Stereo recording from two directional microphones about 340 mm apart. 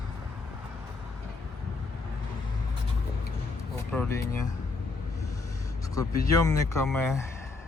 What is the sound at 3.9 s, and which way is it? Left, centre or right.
Speech, centre.